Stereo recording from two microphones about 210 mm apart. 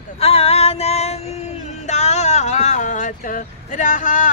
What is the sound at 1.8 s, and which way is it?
Vehicle, 35° left (ahead or behind).